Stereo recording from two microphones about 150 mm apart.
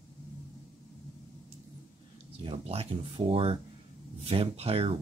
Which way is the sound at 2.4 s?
45° right (ahead or behind).